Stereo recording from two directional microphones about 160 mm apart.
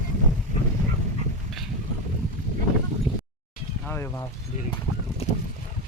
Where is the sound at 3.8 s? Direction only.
10° left (ahead or behind).